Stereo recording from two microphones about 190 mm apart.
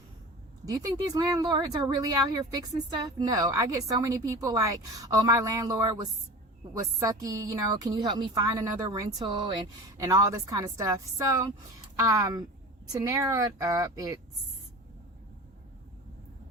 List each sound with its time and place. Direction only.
0.6 s a woman's voice: 20° right (ahead or behind)